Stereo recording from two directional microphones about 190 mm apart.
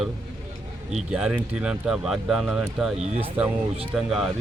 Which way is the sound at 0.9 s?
5° right (ahead or behind).